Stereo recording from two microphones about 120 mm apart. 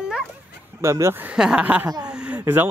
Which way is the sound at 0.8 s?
25° right (ahead or behind).